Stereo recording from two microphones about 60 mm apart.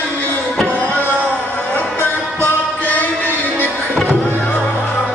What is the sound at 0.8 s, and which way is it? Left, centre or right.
Music, left.